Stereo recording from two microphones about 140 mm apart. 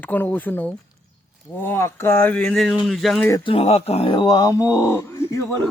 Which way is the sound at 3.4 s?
45° left (ahead or behind).